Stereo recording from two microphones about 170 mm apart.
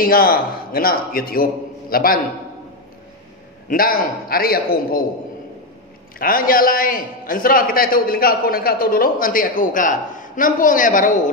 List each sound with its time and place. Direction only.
0.0 s a man's voice: 60° left (ahead or behind)
3.6 s a man's voice: 55° left (ahead or behind)
6.1 s a man's voice: 55° left (ahead or behind)